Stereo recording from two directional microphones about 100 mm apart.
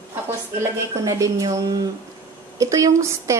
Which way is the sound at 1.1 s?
35° right (ahead or behind).